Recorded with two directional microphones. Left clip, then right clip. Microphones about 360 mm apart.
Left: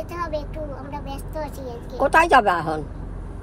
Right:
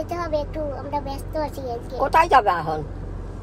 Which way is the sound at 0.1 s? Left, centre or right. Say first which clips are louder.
Right 3 dB; centre.